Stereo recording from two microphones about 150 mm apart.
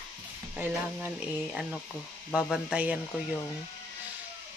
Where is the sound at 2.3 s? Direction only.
5° right (ahead or behind).